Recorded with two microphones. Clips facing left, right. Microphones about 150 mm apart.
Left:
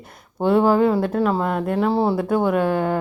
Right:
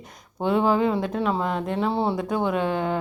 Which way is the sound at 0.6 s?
45° left (ahead or behind).